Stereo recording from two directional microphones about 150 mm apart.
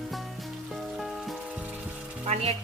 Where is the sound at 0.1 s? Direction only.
Centre (ahead or behind).